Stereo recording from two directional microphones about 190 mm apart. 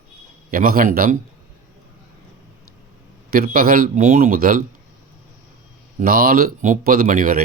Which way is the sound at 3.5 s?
50° right (ahead or behind).